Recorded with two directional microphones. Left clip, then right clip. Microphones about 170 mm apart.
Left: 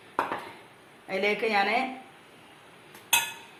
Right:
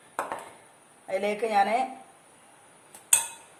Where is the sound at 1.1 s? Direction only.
70° right (ahead or behind).